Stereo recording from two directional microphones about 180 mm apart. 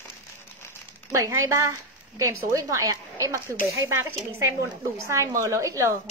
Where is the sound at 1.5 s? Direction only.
15° right (ahead or behind).